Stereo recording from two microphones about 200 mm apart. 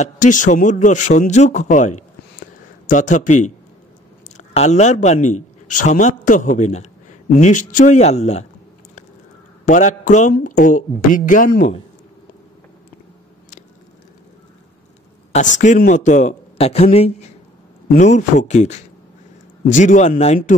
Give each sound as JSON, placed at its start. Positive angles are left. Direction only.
{"t": 0.0, "sound": "a man's voice", "side_deg": 40}
{"t": 4.4, "sound": "a man's voice", "side_deg": 35}
{"t": 9.7, "sound": "a man's voice", "side_deg": 40}
{"t": 15.3, "sound": "a man's voice", "side_deg": 40}